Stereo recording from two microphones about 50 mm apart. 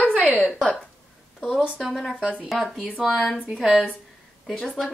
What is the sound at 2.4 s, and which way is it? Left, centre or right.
Speech, centre.